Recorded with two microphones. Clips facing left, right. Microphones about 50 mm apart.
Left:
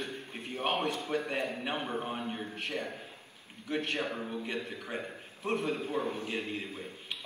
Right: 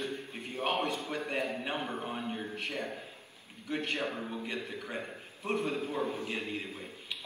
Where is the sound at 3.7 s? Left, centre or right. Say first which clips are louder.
Left 1 dB; left.